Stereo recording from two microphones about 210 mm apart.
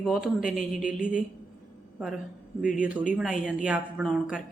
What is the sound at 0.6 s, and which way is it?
Speech, 40° left (ahead or behind).